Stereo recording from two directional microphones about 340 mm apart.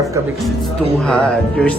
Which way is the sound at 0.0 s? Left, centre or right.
Centre.